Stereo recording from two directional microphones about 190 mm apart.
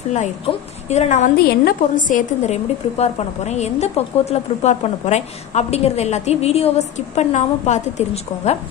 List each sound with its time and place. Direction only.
0.8 s a woman's voice: 35° left (ahead or behind)